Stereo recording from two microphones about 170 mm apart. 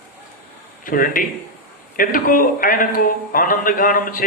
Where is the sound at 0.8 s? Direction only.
55° left (ahead or behind).